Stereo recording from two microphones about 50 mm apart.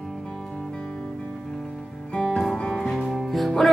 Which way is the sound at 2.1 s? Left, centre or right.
Centre.